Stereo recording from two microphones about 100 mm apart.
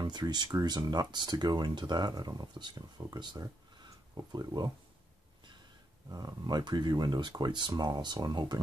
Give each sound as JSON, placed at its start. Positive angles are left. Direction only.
{"t": 0.0, "sound": "speech", "side_deg": -45}
{"t": 6.0, "sound": "speech", "side_deg": -40}